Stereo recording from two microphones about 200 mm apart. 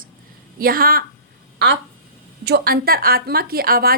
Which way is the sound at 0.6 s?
45° right (ahead or behind).